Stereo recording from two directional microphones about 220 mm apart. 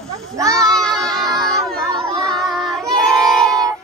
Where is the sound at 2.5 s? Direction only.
Centre (ahead or behind).